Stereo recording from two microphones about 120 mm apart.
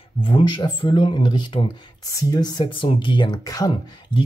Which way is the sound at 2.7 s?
45° left (ahead or behind).